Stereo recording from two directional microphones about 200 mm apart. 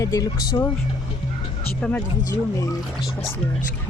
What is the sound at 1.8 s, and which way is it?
Speech, 5° left (ahead or behind).